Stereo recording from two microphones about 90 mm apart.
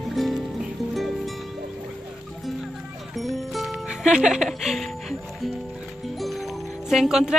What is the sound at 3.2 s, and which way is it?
Music, centre (ahead or behind).